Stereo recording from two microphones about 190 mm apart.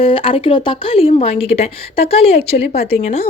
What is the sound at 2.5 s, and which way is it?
Speech, 55° left (ahead or behind).